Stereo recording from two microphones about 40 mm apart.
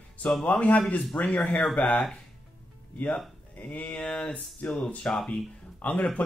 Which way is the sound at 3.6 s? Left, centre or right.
Left.